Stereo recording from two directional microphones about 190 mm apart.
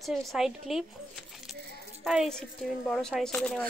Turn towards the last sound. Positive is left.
turn(degrees=5)  # may be behind; listen again after turning